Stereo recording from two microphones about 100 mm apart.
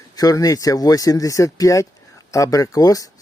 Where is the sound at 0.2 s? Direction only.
35° left (ahead or behind).